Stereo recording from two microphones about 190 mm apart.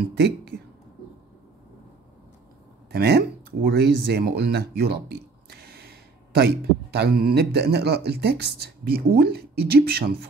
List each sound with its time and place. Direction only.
2.9 s speech: 60° right (ahead or behind)